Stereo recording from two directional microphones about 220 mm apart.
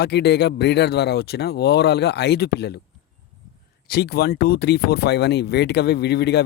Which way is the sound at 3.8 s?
45° left (ahead or behind).